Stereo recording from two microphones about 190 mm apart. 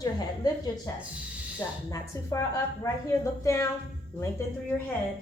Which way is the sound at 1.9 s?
15° left (ahead or behind).